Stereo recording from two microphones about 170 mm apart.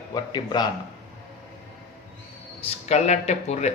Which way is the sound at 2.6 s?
35° left (ahead or behind).